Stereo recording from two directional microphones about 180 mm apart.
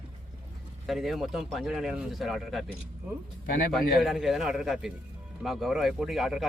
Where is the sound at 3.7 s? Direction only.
Centre (ahead or behind).